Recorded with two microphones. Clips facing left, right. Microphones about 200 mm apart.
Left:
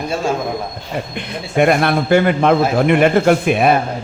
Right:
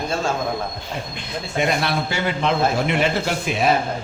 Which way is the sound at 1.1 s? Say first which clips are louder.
Left 7 dB; 60° left (ahead or behind).